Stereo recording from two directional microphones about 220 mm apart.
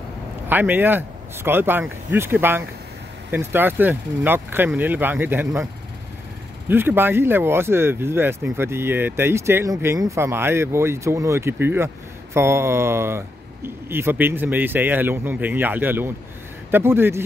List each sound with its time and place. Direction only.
0.5 s speech: 10° right (ahead or behind)
6.7 s speech: 10° right (ahead or behind)